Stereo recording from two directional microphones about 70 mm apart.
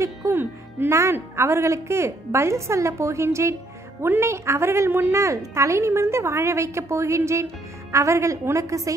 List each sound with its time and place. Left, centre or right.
0.3 s a woman's voice: right